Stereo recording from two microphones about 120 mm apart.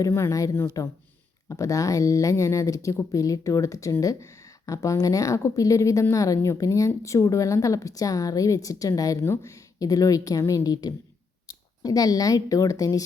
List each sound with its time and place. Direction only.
0.0 s speech: 25° left (ahead or behind)